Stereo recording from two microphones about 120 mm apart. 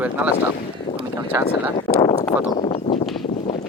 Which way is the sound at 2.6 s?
45° left (ahead or behind).